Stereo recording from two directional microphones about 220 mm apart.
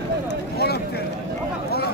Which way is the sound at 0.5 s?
45° left (ahead or behind).